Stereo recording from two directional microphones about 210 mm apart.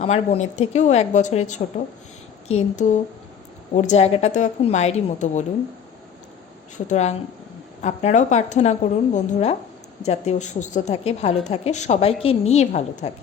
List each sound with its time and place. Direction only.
0.0 s a woman's voice: 30° left (ahead or behind)
6.7 s a woman's voice: 35° left (ahead or behind)